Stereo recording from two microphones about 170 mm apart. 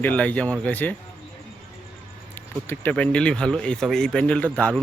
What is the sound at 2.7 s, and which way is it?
Speech, 10° left (ahead or behind).